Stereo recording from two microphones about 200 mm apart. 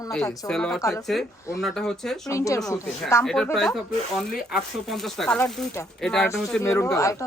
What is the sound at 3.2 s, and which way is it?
Speech, centre (ahead or behind).